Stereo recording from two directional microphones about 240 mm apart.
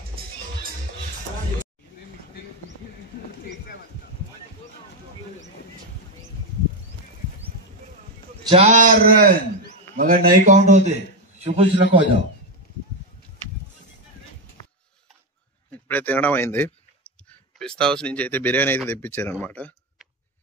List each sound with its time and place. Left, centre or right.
8.5 s a man's voice: right
15.7 s a sound: centre
17.6 s speech: centre